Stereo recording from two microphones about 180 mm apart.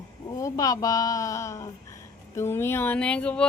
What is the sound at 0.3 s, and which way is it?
Speech, 20° left (ahead or behind).